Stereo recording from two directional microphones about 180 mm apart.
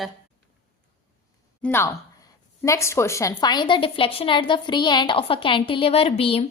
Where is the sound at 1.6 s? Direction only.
15° left (ahead or behind).